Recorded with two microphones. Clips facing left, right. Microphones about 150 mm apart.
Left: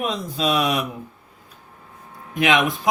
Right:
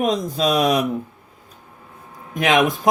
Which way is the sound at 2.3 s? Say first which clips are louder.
Right 2 dB; 45° right (ahead or behind).